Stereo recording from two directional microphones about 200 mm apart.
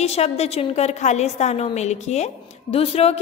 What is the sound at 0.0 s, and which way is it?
Speech, 30° left (ahead or behind).